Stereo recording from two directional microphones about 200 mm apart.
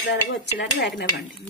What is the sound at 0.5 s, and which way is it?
Speech, 60° left (ahead or behind).